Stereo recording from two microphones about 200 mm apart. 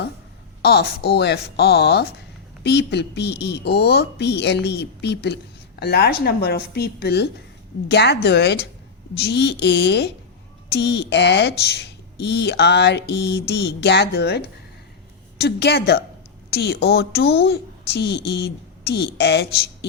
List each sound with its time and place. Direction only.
0.6 s a woman's voice: 55° left (ahead or behind)